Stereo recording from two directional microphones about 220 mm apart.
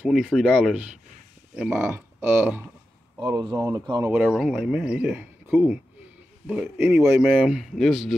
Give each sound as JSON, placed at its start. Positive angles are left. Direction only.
{"t": 0.0, "sound": "speech", "side_deg": -5}
{"t": 4.1, "sound": "speech", "side_deg": -5}